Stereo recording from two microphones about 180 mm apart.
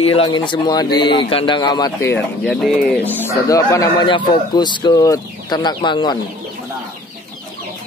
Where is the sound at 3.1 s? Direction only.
15° left (ahead or behind).